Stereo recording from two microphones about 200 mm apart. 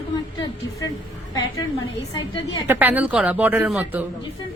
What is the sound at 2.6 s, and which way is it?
Speech, 10° right (ahead or behind).